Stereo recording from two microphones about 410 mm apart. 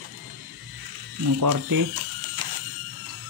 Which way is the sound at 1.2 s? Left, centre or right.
Right.